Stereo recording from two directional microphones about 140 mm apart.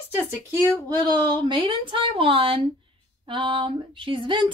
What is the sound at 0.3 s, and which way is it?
A woman's voice, 20° right (ahead or behind).